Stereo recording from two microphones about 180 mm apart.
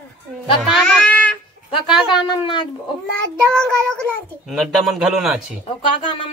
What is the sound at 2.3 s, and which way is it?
Speech, 25° left (ahead or behind).